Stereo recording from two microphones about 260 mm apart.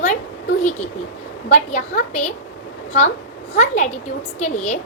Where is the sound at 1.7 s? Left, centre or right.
Left.